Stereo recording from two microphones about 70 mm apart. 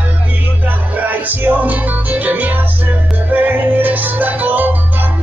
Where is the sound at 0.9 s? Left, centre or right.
Right.